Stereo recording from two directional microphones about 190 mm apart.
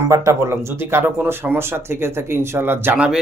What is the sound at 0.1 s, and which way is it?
Speech, 15° right (ahead or behind).